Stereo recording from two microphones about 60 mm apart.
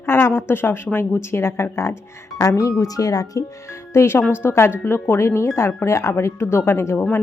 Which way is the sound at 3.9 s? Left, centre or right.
Left.